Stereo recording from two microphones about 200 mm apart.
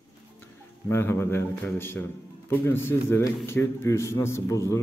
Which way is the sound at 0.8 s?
10° left (ahead or behind).